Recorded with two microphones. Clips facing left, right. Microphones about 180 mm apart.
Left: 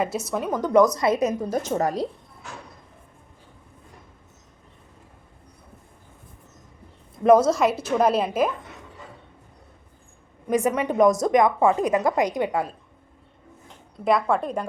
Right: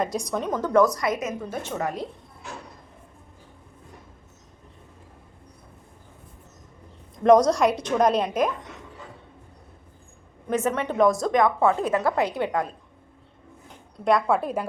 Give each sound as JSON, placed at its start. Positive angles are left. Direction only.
{"t": 0.0, "sound": "a woman's voice", "side_deg": 5}
{"t": 7.2, "sound": "a woman's voice", "side_deg": 5}
{"t": 10.5, "sound": "a woman's voice", "side_deg": 10}
{"t": 14.0, "sound": "a woman's voice", "side_deg": 0}